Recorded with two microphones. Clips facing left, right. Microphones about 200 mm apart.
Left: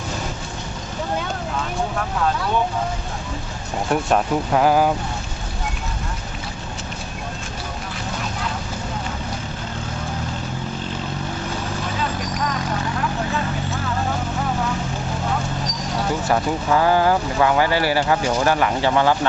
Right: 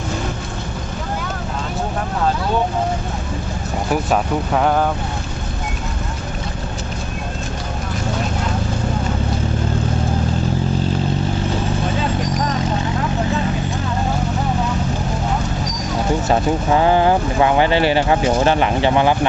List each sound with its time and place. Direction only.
4.1 s speech: centre (ahead or behind)
16.2 s speech: 25° right (ahead or behind)